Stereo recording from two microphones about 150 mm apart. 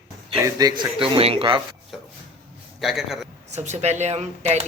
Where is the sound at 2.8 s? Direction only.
Centre (ahead or behind).